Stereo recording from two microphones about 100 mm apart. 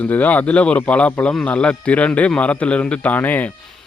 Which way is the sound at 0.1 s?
15° left (ahead or behind).